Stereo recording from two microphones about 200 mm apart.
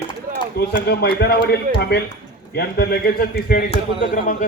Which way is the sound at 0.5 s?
55° left (ahead or behind).